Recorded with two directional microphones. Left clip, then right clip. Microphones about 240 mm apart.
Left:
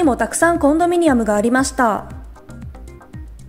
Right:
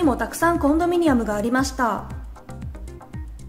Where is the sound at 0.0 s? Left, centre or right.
Left.